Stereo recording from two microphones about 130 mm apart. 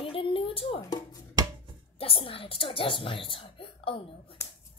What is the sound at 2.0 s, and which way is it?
A woman's voice, 45° left (ahead or behind).